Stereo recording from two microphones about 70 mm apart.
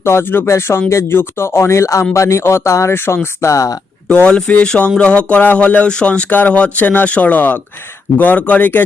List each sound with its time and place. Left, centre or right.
0.0 s speech: left
3.4 s speech: left
4.3 s speech: centre